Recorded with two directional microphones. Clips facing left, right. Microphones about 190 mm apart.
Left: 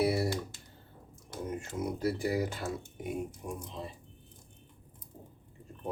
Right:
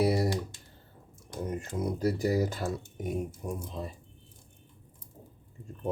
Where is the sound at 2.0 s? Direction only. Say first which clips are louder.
Right 4 dB; 40° right (ahead or behind).